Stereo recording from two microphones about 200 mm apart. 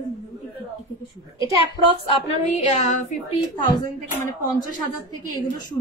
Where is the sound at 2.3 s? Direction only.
35° left (ahead or behind).